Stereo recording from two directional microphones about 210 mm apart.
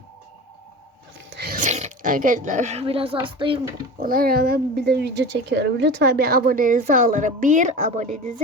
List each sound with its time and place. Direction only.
1.4 s speech: 40° right (ahead or behind); by 3.6 s 25° right (ahead or behind)
4.0 s speech: 45° right (ahead or behind)